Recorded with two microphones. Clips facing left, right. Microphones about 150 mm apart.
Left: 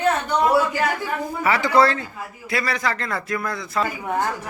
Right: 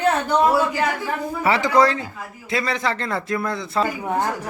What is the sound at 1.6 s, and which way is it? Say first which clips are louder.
Speech: left 1 dB; 15° right (ahead or behind).